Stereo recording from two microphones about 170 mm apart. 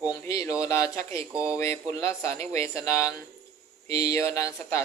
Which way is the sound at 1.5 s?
15° left (ahead or behind).